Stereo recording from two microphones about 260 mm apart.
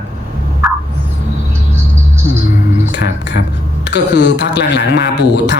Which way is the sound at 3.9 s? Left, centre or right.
Left.